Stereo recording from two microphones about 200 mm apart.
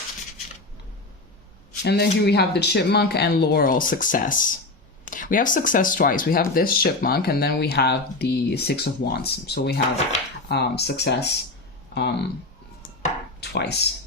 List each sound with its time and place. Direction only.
1.8 s speech: 55° left (ahead or behind)
13.4 s speech: 55° left (ahead or behind)